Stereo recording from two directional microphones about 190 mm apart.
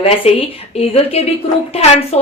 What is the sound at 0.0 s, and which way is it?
A woman's voice, 30° left (ahead or behind).